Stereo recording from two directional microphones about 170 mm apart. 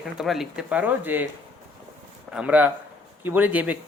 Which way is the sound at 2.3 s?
10° right (ahead or behind).